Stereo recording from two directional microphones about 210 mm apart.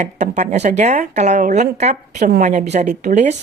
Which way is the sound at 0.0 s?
35° right (ahead or behind).